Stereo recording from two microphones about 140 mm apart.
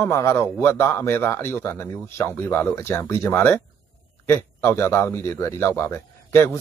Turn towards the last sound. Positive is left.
turn(degrees=20)  # may be behind; listen again after turning